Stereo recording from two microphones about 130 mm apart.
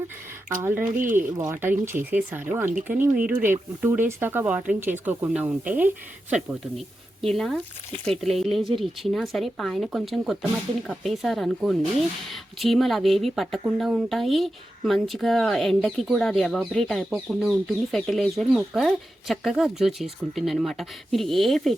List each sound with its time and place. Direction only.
0.6 s speech: 15° right (ahead or behind)
0.9 s speech: 90° right
1.1 s speech: 20° right (ahead or behind)
7.3 s speech: centre (ahead or behind)